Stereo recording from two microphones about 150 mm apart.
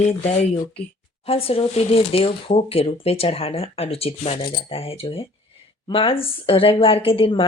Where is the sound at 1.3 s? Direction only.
40° left (ahead or behind).